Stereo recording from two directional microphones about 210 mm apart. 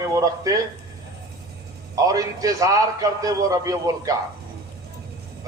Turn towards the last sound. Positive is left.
turn(degrees=-15)  # may be behind; listen again after turning